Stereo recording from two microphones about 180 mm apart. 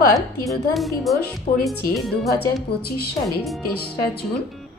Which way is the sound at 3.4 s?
Centre (ahead or behind).